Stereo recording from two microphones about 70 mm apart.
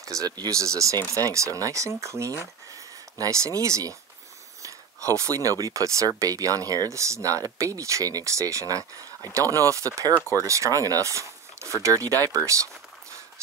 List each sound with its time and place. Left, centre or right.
0.0 s speech: right